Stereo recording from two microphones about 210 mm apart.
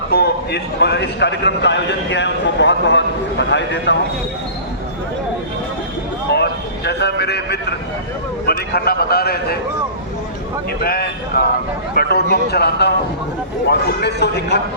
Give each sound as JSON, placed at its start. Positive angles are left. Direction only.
{"t": 0.1, "sound": "a man's voice", "side_deg": 50}
{"t": 6.3, "sound": "vehicle", "side_deg": 50}
{"t": 8.4, "sound": "a man's voice", "side_deg": 50}
{"t": 10.8, "sound": "a man's voice", "side_deg": 45}